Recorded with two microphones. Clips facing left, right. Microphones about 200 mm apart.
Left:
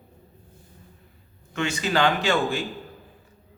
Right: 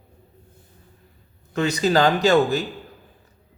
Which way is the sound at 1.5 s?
35° right (ahead or behind).